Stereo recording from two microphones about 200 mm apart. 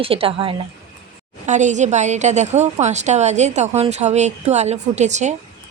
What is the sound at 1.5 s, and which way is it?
A woman's voice, 35° right (ahead or behind).